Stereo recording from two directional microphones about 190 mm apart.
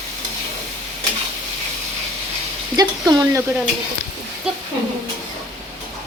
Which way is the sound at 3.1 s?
15° right (ahead or behind).